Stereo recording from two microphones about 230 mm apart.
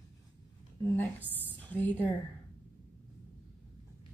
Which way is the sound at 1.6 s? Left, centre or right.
Centre.